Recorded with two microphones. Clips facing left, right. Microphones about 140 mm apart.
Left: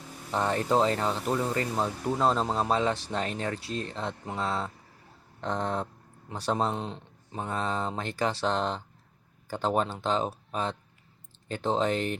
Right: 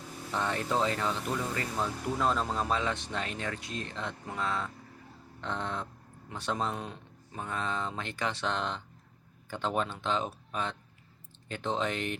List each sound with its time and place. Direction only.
0.3 s speech: 35° left (ahead or behind)